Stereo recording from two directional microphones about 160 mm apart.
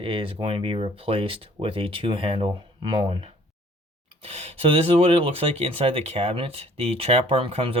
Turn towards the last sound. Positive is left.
turn(degrees=-35)  # may be behind; listen again after turning